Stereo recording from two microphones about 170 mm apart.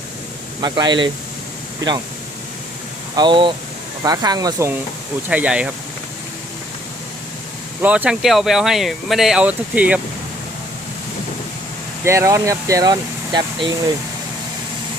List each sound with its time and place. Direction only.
0.6 s speech: 25° right (ahead or behind)
3.2 s speech: 30° right (ahead or behind)
5.3 s speech: 5° right (ahead or behind)
7.8 s speech: 10° right (ahead or behind)
12.0 s speech: 15° right (ahead or behind)